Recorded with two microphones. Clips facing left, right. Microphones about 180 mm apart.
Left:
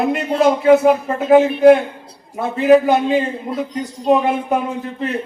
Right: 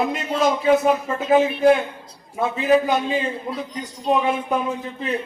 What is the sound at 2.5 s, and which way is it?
A man's voice, 60° left (ahead or behind).